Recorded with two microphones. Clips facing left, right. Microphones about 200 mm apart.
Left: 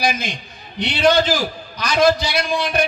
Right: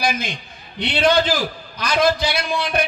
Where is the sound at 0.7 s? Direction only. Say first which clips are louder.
Left 1 dB; 55° right (ahead or behind).